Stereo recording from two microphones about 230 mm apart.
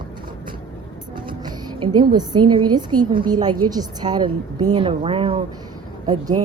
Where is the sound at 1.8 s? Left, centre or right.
Centre.